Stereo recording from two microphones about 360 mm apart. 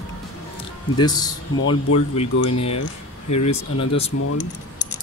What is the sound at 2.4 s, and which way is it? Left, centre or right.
Speech, left.